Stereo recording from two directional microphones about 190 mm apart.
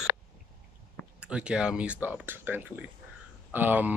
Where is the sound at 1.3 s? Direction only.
5° right (ahead or behind).